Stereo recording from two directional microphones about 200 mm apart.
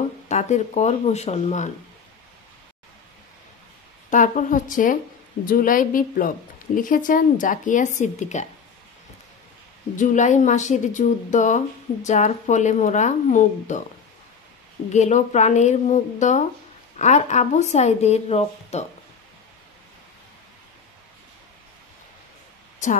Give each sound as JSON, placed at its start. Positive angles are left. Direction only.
{"t": 0.3, "sound": "a woman's voice", "side_deg": 35}
{"t": 4.1, "sound": "a woman's voice", "side_deg": 40}
{"t": 9.9, "sound": "a woman's voice", "side_deg": 40}
{"t": 14.9, "sound": "a woman's voice", "side_deg": 35}